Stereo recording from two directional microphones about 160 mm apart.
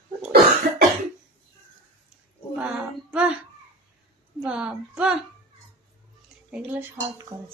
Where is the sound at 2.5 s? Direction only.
5° right (ahead or behind).